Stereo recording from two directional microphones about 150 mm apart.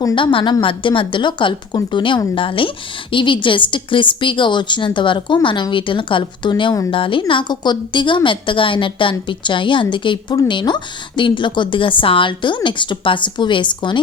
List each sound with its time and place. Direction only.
0.0 s a woman's voice: 30° left (ahead or behind)